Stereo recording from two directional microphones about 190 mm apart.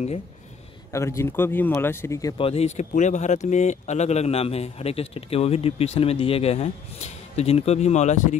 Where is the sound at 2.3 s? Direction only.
30° left (ahead or behind).